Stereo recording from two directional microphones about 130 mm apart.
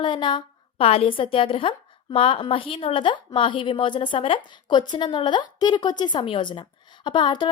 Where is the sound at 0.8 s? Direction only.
50° left (ahead or behind).